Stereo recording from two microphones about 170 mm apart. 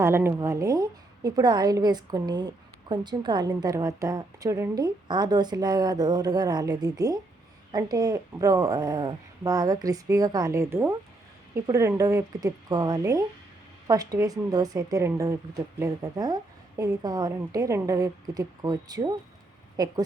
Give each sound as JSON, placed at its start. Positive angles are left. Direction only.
{"t": 0.0, "sound": "a woman's voice", "side_deg": -15}